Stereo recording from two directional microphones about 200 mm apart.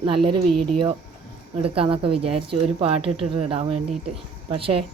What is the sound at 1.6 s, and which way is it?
Speech, 25° right (ahead or behind).